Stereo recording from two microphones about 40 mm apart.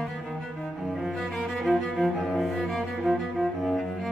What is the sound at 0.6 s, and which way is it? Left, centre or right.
Cello, centre.